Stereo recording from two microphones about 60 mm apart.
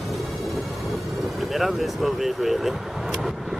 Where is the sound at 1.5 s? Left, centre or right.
Centre.